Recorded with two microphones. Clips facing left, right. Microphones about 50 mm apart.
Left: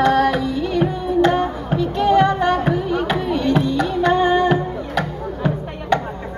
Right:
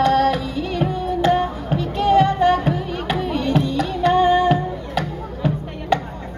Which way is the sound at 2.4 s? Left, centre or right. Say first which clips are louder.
Even; left.